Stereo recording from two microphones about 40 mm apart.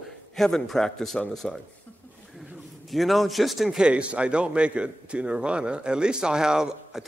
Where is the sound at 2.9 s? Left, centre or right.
Centre.